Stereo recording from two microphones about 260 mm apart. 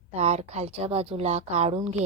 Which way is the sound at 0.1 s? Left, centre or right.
Right.